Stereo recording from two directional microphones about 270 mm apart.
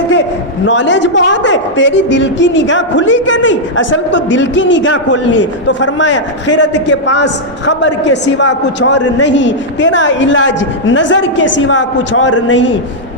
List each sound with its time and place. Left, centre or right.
0.1 s a man's voice: left